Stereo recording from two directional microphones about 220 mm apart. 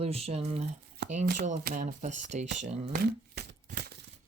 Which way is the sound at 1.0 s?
50° right (ahead or behind).